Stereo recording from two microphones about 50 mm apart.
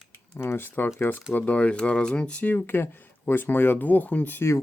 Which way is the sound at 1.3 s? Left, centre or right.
Left.